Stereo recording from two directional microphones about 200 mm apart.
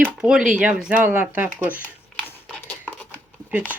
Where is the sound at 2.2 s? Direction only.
10° left (ahead or behind).